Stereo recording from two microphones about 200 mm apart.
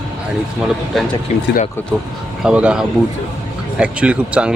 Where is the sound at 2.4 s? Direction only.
5° right (ahead or behind).